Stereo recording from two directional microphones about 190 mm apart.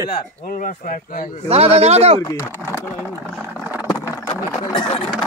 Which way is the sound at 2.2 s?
15° left (ahead or behind).